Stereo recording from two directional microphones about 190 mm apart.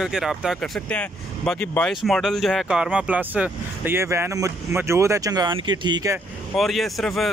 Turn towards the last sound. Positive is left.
turn(degrees=0)  # may be behind; listen again after turning